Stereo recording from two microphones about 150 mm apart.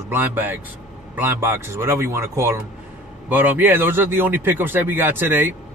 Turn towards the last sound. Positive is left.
turn(degrees=-15)  # may be behind; listen again after turning